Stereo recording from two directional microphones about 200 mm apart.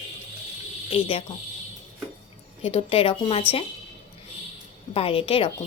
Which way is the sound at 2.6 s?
30° left (ahead or behind).